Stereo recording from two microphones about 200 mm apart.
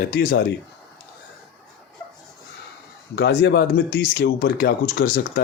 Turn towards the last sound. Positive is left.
turn(degrees=45)  # may be behind; listen again after turning